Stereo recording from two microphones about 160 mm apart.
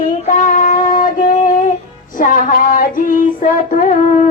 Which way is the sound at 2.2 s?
55° left (ahead or behind).